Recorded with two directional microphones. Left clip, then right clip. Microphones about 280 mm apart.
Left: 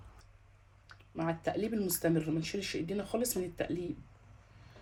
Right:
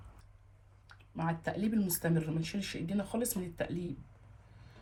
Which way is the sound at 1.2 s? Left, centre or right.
Left.